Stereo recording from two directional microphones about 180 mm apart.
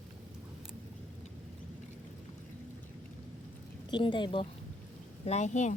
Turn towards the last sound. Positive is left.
turn(degrees=40)  # may be behind; listen again after turning